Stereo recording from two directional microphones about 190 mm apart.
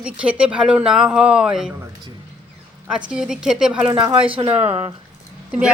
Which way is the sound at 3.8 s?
25° right (ahead or behind).